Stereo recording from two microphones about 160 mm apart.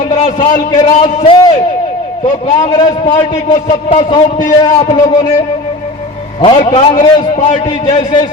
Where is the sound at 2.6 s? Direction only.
25° left (ahead or behind).